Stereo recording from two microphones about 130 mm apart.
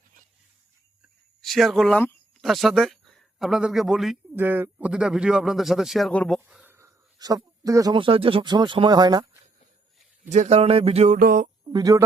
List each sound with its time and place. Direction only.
1.4 s speech: centre (ahead or behind)
4.4 s speech: 15° right (ahead or behind); by 6.4 s 5° left (ahead or behind)
6.7 s a sound: 20° right (ahead or behind)
7.9 s speech: 45° right (ahead or behind)
10.2 s speech: 65° right (ahead or behind)
11.7 s speech: 25° right (ahead or behind)